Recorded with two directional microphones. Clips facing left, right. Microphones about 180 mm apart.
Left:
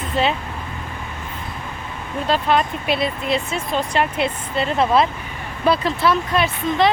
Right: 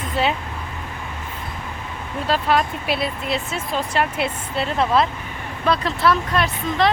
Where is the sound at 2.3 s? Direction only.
5° right (ahead or behind).